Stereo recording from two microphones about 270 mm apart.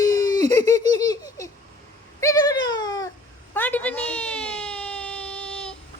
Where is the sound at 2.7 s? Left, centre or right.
Centre.